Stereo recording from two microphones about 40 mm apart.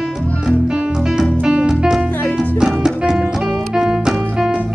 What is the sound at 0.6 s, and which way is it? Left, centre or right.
Music, centre.